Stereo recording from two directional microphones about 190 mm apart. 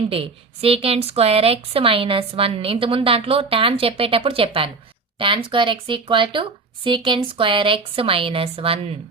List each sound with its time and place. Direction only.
0.1 s a woman's voice: 30° right (ahead or behind)